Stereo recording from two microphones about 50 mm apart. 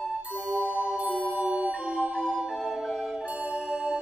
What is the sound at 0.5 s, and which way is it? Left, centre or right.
Music, right.